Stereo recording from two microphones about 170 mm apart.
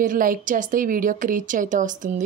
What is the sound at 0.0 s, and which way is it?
Speech, 55° right (ahead or behind).